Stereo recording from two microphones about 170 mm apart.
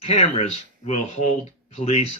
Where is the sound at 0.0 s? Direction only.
40° left (ahead or behind).